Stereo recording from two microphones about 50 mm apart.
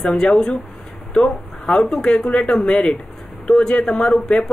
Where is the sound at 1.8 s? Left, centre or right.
Centre.